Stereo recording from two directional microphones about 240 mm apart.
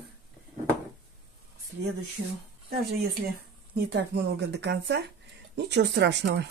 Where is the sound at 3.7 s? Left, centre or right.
Right.